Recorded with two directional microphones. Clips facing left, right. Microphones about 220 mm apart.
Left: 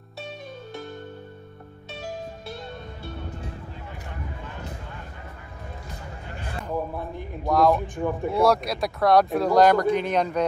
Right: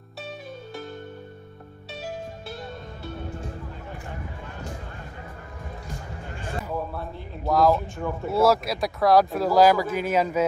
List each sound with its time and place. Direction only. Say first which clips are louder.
6.9 s a sound: left 2 dB; 15° left (ahead or behind)
7.4 s speech: even; centre (ahead or behind)
7.8 s speech: left 3 dB; 15° left (ahead or behind)
8.3 s speech: right 1 dB; centre (ahead or behind)